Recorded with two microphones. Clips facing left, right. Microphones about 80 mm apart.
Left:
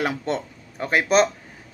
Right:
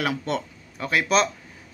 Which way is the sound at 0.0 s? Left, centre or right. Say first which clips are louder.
Left 1 dB; left.